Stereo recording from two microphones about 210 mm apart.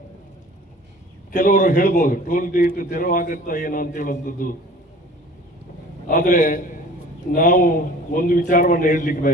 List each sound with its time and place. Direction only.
1.3 s a man's voice: 40° left (ahead or behind)
6.1 s a man's voice: 40° left (ahead or behind)